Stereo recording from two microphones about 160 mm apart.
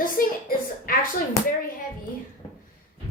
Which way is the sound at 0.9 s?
60° left (ahead or behind).